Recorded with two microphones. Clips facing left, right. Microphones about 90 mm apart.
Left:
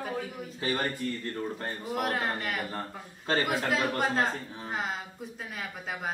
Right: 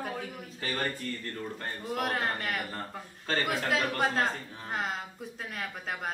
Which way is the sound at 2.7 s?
25° left (ahead or behind).